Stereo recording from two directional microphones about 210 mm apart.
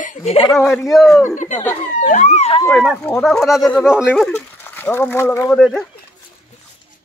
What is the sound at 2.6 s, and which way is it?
Speech, 5° left (ahead or behind).